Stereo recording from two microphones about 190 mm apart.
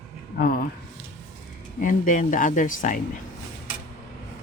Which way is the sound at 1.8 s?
45° left (ahead or behind).